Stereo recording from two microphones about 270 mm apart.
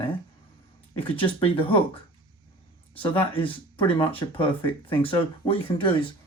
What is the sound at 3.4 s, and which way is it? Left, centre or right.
Speech, centre.